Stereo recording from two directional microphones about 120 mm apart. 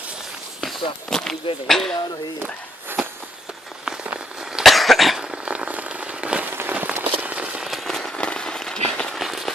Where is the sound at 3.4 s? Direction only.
5° right (ahead or behind).